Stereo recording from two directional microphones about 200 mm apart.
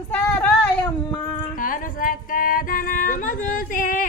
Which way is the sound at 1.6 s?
45° left (ahead or behind).